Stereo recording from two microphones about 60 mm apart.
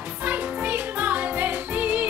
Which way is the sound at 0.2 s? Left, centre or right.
Right.